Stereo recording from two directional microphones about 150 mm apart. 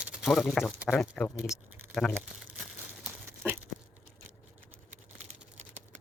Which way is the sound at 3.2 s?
15° right (ahead or behind).